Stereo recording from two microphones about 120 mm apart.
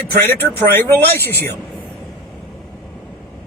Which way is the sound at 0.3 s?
15° left (ahead or behind).